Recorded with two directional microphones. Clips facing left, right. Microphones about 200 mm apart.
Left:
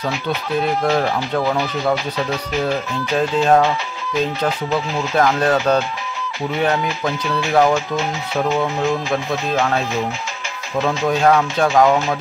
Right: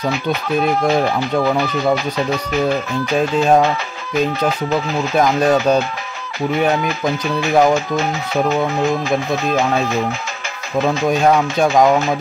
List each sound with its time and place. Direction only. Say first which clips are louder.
0.8 s speech: right 2 dB; 15° right (ahead or behind)
5.1 s speech: right 2 dB; 15° right (ahead or behind)
7.2 s speech: right 2 dB; 45° right (ahead or behind)
7.5 s speech: right 2 dB; 15° right (ahead or behind)
9.1 s speech: right 3 dB; 15° right (ahead or behind)
11.1 s speech: left 1 dB; 15° right (ahead or behind)